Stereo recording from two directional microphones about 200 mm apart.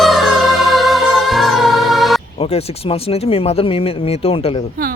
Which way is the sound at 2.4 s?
30° left (ahead or behind).